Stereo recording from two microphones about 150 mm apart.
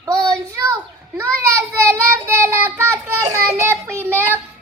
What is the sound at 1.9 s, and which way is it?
Child singing, 15° right (ahead or behind).